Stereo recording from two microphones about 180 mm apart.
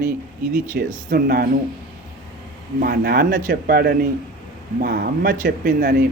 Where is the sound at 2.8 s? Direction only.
60° right (ahead or behind).